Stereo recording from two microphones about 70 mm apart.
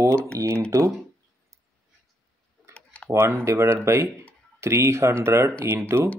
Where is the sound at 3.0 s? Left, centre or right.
Right.